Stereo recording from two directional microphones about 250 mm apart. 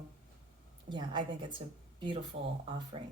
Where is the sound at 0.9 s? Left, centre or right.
Centre.